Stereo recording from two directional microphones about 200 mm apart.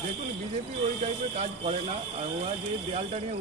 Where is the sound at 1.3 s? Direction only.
35° right (ahead or behind).